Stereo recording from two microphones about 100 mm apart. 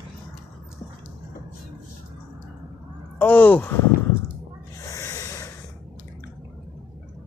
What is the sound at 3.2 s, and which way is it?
Speech, 15° left (ahead or behind).